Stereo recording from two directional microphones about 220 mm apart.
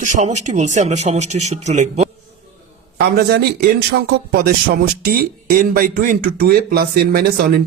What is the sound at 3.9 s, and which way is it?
Speech, 45° right (ahead or behind).